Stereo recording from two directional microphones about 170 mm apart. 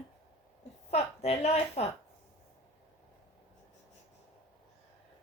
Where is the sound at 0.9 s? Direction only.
40° left (ahead or behind).